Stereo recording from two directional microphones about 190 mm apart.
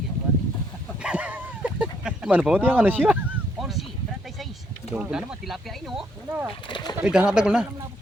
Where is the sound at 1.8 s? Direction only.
5° right (ahead or behind).